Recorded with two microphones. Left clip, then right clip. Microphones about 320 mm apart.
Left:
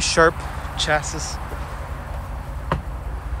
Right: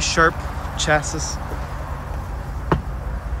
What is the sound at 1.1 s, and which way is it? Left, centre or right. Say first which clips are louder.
Speech: right 2 dB; right.